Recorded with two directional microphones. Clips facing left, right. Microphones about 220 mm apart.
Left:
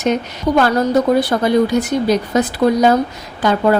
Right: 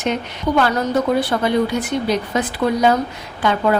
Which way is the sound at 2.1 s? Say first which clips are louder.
Left 4 dB; 40° left (ahead or behind).